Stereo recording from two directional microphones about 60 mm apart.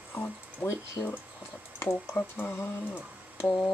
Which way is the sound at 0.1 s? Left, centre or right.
Left.